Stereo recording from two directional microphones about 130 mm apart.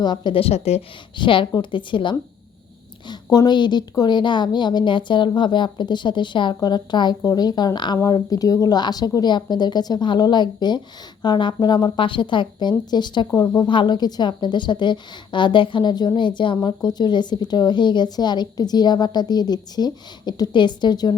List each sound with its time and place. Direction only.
0.0 s a woman's voice: 35° left (ahead or behind); by 0.9 s 55° left (ahead or behind)
1.1 s speech: 40° left (ahead or behind)